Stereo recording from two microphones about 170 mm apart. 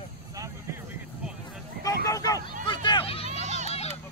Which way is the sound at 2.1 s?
20° left (ahead or behind).